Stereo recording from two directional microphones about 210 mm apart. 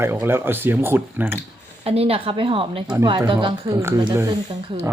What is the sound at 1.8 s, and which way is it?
A woman's voice, 30° right (ahead or behind).